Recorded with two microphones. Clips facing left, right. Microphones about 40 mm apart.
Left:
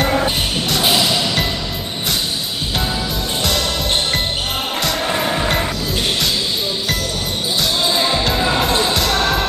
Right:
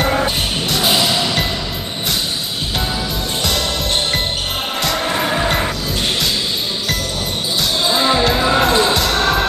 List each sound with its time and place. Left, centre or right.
0.0 s music: centre
4.8 s music: centre
7.8 s music: centre